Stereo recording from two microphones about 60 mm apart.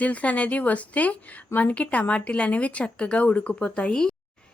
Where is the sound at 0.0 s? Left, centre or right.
Left.